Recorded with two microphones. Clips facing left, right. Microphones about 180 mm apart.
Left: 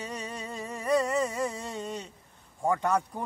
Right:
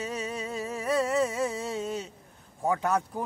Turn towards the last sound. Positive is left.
turn(degrees=-5)  # may be behind; listen again after turning